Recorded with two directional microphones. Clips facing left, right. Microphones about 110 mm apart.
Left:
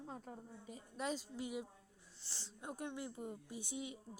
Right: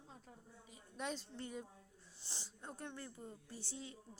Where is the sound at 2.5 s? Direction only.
10° left (ahead or behind).